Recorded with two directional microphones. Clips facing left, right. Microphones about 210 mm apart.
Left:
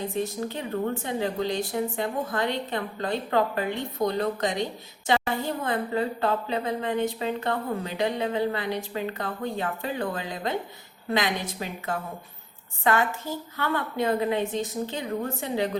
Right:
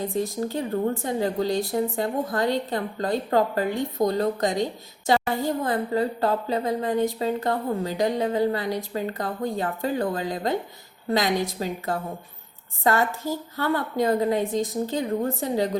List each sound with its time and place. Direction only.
1.0 s a woman's voice: 40° right (ahead or behind)